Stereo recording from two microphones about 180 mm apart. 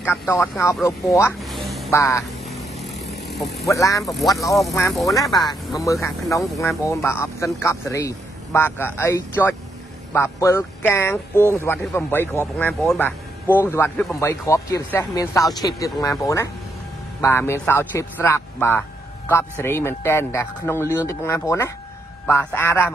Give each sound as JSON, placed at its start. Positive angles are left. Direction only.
{"t": 0.0, "sound": "a man's voice", "side_deg": 10}
{"t": 1.4, "sound": "music", "side_deg": 0}
{"t": 1.9, "sound": "a man's voice", "side_deg": 15}
{"t": 2.2, "sound": "vehicle", "side_deg": 0}
{"t": 3.6, "sound": "a man's voice", "side_deg": 15}
{"t": 4.0, "sound": "speech", "side_deg": 0}
{"t": 5.0, "sound": "a man's voice", "side_deg": 20}